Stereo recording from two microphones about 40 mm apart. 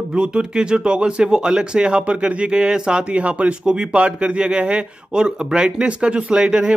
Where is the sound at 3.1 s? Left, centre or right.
Right.